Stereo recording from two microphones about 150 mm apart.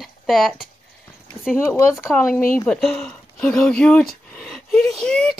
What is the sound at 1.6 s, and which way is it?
Speech, 15° left (ahead or behind).